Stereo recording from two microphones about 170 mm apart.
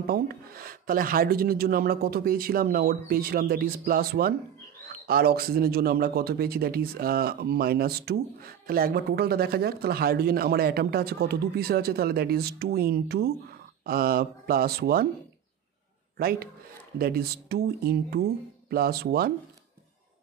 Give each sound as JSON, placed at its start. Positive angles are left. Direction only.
{"t": 0.0, "sound": "a man's voice", "side_deg": -60}
{"t": 16.2, "sound": "a man's voice", "side_deg": -60}